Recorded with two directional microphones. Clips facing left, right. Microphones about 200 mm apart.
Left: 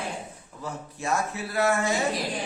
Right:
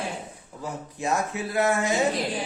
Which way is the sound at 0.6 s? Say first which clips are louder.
Right 2 dB; 15° right (ahead or behind).